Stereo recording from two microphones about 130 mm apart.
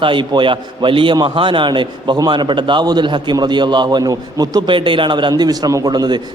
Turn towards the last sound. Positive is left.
turn(degrees=-30)  # may be behind; listen again after turning